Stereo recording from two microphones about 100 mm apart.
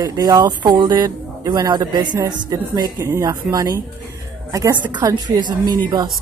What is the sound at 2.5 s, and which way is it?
Speech, 35° right (ahead or behind).